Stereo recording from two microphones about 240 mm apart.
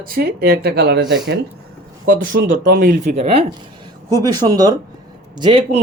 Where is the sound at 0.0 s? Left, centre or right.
Right.